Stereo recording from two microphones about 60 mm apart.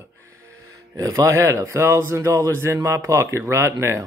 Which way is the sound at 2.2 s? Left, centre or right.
Right.